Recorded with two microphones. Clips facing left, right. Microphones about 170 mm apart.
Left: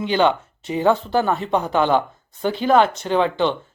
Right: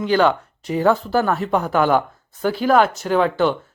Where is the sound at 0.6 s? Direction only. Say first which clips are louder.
Right 1 dB; centre (ahead or behind).